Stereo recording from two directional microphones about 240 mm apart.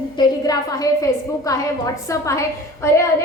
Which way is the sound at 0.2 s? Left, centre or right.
Centre.